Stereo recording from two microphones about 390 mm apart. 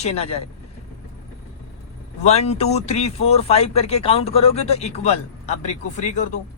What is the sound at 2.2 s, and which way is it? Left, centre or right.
Speech, centre.